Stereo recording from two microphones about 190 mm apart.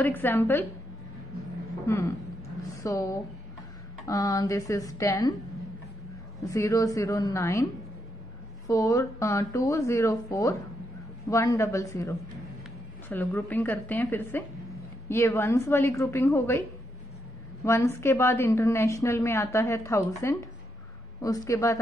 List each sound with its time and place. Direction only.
0.0 s a woman's voice: 10° left (ahead or behind)
1.9 s a woman's voice: 15° left (ahead or behind)
6.5 s a woman's voice: 15° left (ahead or behind)
8.6 s a woman's voice: 15° left (ahead or behind)
17.6 s a woman's voice: 15° left (ahead or behind)